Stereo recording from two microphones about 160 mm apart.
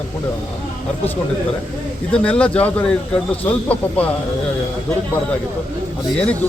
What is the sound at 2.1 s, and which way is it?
Speech, 5° left (ahead or behind).